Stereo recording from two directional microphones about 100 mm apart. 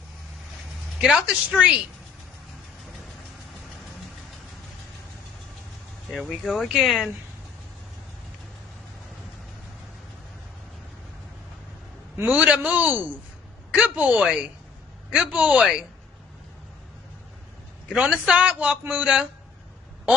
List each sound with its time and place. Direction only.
1.0 s a man's voice: 5° right (ahead or behind)
6.0 s speech: centre (ahead or behind)
12.2 s a man's voice: 15° right (ahead or behind)
17.9 s a man's voice: 10° right (ahead or behind)